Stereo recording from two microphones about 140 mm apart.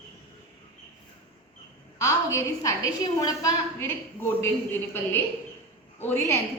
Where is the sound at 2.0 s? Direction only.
20° left (ahead or behind).